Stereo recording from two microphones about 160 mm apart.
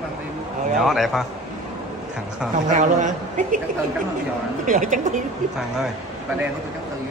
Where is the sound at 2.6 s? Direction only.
50° right (ahead or behind).